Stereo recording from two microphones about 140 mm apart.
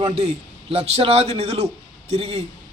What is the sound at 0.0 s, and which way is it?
A man's voice, 45° right (ahead or behind).